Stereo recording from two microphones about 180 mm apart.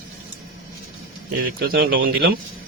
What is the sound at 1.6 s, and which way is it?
Speech, 60° right (ahead or behind).